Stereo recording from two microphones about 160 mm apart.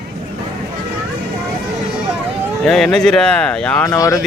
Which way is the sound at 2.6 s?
5° left (ahead or behind).